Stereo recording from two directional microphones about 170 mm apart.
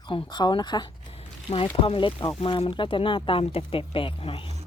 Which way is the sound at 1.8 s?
30° left (ahead or behind).